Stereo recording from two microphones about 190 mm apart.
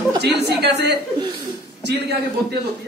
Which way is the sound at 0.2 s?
60° right (ahead or behind).